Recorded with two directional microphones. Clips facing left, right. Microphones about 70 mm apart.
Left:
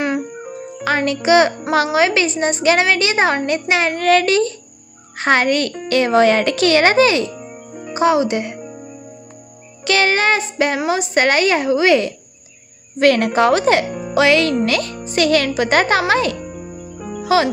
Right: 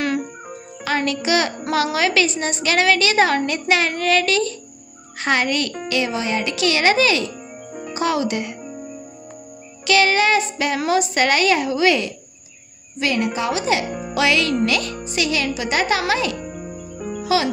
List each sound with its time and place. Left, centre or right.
0.8 s a woman's voice: left
9.8 s a woman's voice: left
10.8 s a woman's voice: left
13.0 s a woman's voice: left